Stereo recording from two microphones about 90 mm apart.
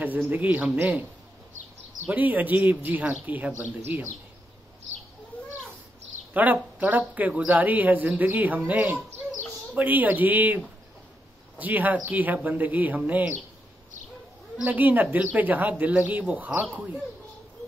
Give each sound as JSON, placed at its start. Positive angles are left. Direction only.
{"t": 0.0, "sound": "speech", "side_deg": -20}
{"t": 2.0, "sound": "speech", "side_deg": -15}
{"t": 6.3, "sound": "speech", "side_deg": -20}
{"t": 14.6, "sound": "speech", "side_deg": -20}